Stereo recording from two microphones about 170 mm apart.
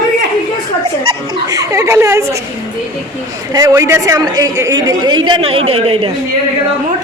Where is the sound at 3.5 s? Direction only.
20° right (ahead or behind); by 6.1 s 35° right (ahead or behind).